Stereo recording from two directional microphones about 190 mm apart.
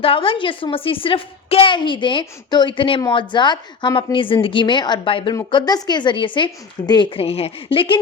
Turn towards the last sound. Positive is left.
turn(degrees=30)  # may be behind; listen again after turning